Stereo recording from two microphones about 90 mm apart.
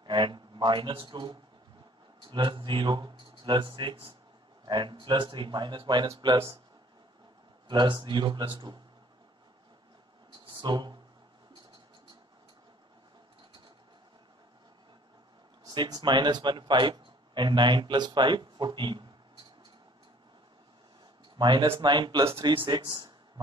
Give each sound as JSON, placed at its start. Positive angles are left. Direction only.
{"t": 0.0, "sound": "a man's voice", "side_deg": -60}
{"t": 7.6, "sound": "a man's voice", "side_deg": -65}
{"t": 10.4, "sound": "a sound", "side_deg": -60}
{"t": 15.7, "sound": "a man's voice", "side_deg": -55}
{"t": 21.4, "sound": "a man's voice", "side_deg": -60}
{"t": 22.4, "sound": "speech", "side_deg": -75}
{"t": 22.7, "sound": "a man's voice", "side_deg": -55}